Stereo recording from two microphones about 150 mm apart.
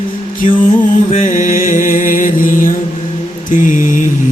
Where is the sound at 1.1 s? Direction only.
60° left (ahead or behind).